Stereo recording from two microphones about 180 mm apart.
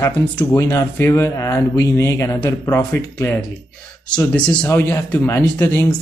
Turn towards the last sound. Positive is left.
turn(degrees=10)  # may be behind; listen again after turning